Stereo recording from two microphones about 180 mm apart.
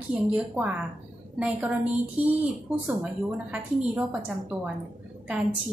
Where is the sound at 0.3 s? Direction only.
10° right (ahead or behind).